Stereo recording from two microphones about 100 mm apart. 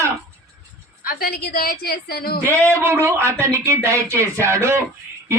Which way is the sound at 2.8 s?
25° right (ahead or behind).